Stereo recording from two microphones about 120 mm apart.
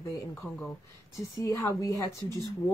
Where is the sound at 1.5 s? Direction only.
25° left (ahead or behind).